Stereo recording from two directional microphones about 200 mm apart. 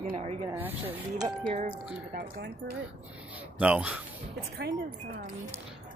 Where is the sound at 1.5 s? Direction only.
30° right (ahead or behind).